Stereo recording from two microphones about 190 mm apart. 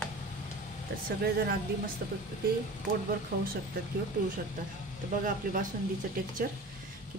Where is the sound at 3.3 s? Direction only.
50° right (ahead or behind).